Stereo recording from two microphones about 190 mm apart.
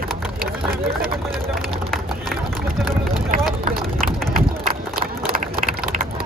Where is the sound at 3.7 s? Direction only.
50° right (ahead or behind).